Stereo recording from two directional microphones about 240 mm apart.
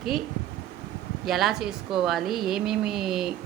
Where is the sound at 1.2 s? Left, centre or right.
Centre.